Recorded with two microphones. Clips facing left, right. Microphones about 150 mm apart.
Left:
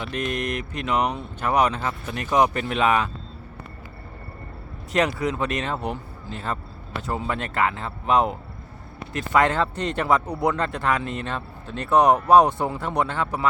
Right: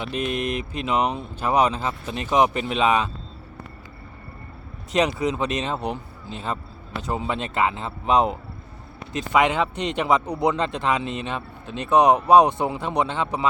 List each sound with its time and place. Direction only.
0.0 s speech: 20° right (ahead or behind)
1.9 s speech: 15° right (ahead or behind)
4.9 s a man's voice: 20° right (ahead or behind)